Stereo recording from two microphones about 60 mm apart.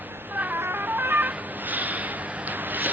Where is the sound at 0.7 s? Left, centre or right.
Right.